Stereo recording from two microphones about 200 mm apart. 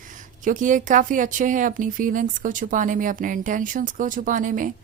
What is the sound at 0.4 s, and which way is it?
Speech, 40° right (ahead or behind).